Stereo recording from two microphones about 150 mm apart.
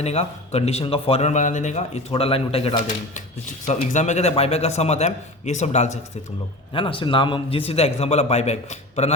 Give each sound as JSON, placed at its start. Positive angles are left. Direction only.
{"t": 0.0, "sound": "speech", "side_deg": 45}
{"t": 6.7, "sound": "speech", "side_deg": 35}